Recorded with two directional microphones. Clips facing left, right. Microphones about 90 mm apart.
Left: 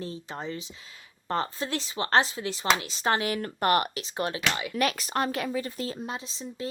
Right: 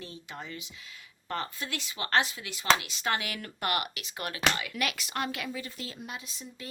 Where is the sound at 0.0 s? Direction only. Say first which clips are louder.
Left 7 dB; 35° left (ahead or behind).